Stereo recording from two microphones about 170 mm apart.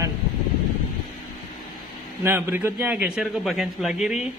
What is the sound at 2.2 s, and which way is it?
A man's voice, 10° right (ahead or behind).